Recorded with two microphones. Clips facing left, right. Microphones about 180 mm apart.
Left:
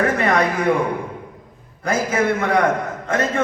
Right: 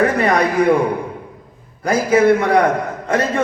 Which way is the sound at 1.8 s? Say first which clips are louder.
Right 6 dB; 35° right (ahead or behind).